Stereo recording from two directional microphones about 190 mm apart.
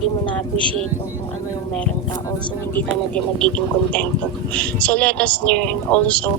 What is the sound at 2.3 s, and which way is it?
Speech, 10° left (ahead or behind).